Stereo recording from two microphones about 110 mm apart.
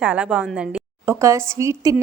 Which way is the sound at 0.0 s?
10° right (ahead or behind).